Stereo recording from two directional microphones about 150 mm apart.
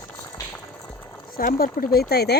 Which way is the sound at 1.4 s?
75° left (ahead or behind).